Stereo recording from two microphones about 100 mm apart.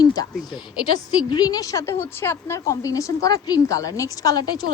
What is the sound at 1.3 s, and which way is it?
Speech, 40° left (ahead or behind).